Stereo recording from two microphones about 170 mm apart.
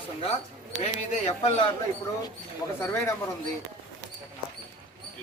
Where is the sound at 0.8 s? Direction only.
40° left (ahead or behind).